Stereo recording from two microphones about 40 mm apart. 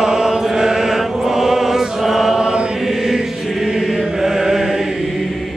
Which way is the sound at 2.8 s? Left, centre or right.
Centre.